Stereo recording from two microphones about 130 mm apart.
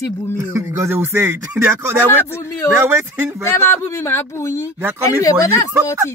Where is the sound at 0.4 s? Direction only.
20° right (ahead or behind).